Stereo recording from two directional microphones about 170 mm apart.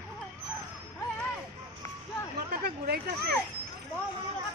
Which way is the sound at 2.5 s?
65° right (ahead or behind).